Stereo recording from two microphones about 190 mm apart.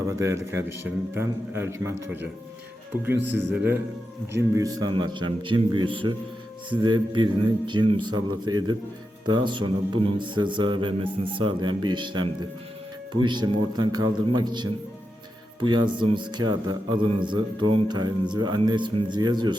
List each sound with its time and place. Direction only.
0.1 s a man's voice: 15° right (ahead or behind)
3.0 s a man's voice: 10° right (ahead or behind)